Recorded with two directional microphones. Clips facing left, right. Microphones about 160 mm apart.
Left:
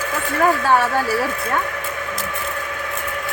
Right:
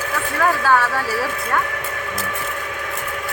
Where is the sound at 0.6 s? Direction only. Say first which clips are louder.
Left 1 dB; 25° left (ahead or behind).